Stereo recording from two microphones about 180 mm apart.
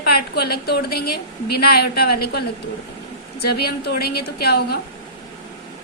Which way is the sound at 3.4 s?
65° left (ahead or behind).